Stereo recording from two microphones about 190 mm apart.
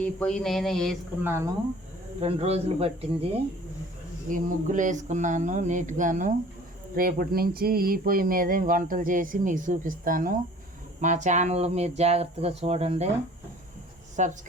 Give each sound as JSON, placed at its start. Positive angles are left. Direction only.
{"t": 0.0, "sound": "a sound", "side_deg": 5}
{"t": 1.2, "sound": "speech", "side_deg": -15}
{"t": 2.2, "sound": "speech", "side_deg": -30}
{"t": 4.3, "sound": "speech", "side_deg": -40}
{"t": 14.2, "sound": "speech", "side_deg": -40}